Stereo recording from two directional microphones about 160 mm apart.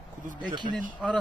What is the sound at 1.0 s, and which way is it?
Speech, 5° right (ahead or behind).